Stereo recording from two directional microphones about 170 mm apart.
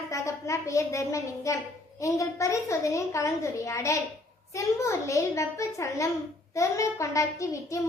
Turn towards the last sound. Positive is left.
turn(degrees=20)  # may be behind; listen again after turning